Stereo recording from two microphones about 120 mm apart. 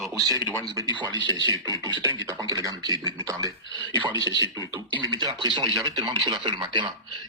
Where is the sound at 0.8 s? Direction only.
35° right (ahead or behind).